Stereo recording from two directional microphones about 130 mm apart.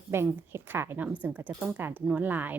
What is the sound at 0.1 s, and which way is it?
Speech, 20° right (ahead or behind).